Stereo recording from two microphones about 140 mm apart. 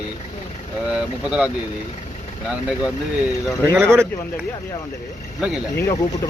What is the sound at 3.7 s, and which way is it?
Speech, 15° right (ahead or behind).